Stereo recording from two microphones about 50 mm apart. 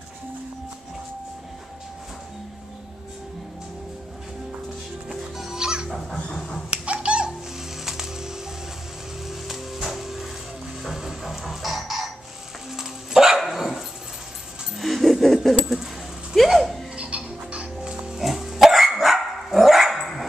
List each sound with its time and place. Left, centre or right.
5.4 s music: centre
5.9 s music: centre
6.3 s dog: centre
6.7 s a sound: right
7.8 s music: centre
10.8 s chicken: centre
12.7 s dog: centre
15.6 s a sound: centre
16.9 s music: right
18.2 s dog: centre